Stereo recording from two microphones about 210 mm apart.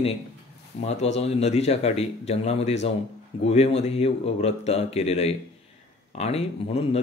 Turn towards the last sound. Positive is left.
turn(degrees=30)  # may be behind; listen again after turning